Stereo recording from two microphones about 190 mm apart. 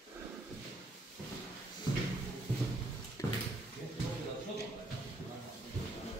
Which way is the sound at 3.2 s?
15° left (ahead or behind).